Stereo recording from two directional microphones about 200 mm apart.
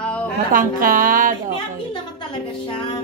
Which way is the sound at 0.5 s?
45° right (ahead or behind).